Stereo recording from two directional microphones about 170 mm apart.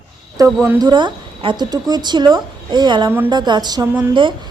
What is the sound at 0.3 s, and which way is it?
A woman's voice, 15° right (ahead or behind).